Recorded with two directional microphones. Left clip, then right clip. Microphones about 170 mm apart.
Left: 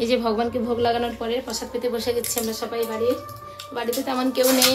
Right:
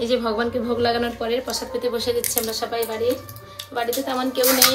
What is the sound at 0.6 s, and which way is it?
A woman's voice, 15° left (ahead or behind).